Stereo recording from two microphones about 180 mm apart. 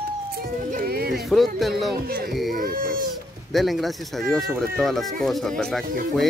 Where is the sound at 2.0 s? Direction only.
60° right (ahead or behind).